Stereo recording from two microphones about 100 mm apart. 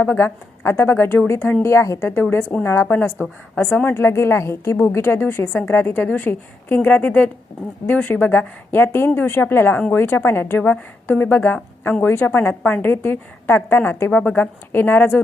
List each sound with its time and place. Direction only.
0.0 s a woman's voice: 15° left (ahead or behind)
2.3 s a woman's voice: 15° left (ahead or behind)